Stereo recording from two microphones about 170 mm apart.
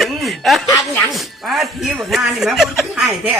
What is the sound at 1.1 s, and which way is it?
A man's voice, centre (ahead or behind).